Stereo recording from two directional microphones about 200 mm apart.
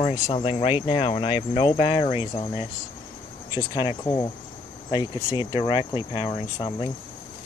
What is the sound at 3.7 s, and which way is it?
Speech, 20° left (ahead or behind).